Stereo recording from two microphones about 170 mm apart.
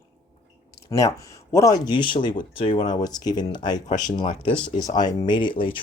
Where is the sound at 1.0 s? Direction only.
20° left (ahead or behind).